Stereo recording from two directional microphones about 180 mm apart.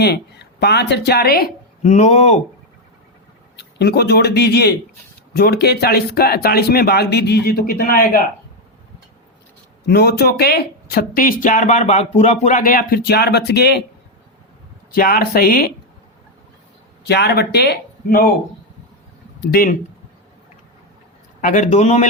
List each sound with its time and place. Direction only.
0.0 s speech: 65° left (ahead or behind)
1.8 s speech: 40° left (ahead or behind)
3.6 s speech: 65° left (ahead or behind)
9.8 s speech: 65° left (ahead or behind)
14.9 s speech: 55° left (ahead or behind)
17.1 s speech: 65° left (ahead or behind)
19.4 s speech: 55° left (ahead or behind)
21.4 s speech: 45° left (ahead or behind)